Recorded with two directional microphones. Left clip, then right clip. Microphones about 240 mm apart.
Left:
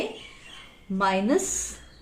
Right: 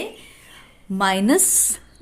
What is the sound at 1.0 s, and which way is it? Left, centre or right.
Speech, right.